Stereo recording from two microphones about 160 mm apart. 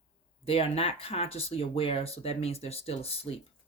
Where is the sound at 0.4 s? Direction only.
35° left (ahead or behind).